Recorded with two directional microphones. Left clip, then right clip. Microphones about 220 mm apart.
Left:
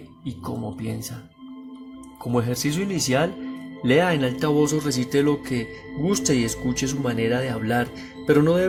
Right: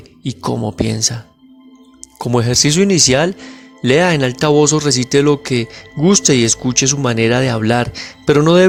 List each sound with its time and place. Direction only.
0.2 s speech: 45° right (ahead or behind)
2.1 s speech: 45° right (ahead or behind)